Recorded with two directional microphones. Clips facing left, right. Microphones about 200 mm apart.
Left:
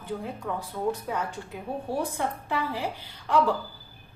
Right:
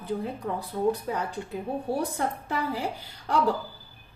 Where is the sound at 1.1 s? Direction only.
35° right (ahead or behind).